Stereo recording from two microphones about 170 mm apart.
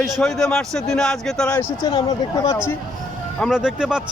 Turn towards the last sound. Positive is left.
turn(degrees=-5)  # may be behind; listen again after turning